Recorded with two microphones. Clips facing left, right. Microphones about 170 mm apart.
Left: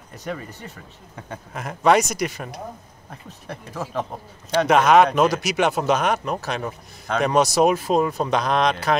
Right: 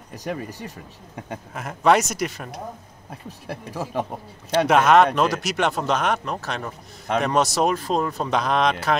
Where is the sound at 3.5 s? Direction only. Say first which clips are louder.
Right 1 dB; 10° right (ahead or behind).